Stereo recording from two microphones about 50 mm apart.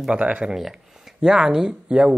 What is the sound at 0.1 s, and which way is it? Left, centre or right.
Speech, right.